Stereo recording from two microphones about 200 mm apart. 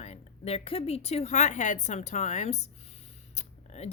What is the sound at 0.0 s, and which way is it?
Speech, 30° left (ahead or behind).